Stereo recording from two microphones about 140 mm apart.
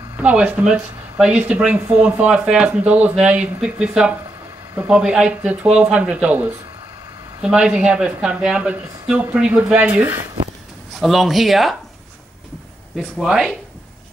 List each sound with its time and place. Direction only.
0.2 s speech: 10° right (ahead or behind)
11.0 s speech: centre (ahead or behind)
13.2 s speech: 5° right (ahead or behind)